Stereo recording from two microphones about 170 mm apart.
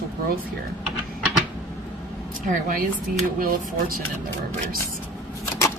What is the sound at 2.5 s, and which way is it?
A woman's voice, 55° right (ahead or behind).